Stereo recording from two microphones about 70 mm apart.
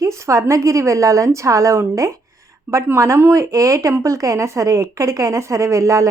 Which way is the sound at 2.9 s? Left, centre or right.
Right.